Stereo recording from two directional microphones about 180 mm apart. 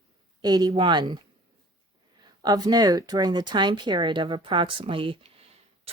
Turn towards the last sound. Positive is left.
turn(degrees=-30)  # may be behind; listen again after turning